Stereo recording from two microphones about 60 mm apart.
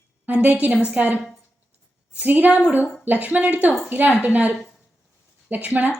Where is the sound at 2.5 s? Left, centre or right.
Centre.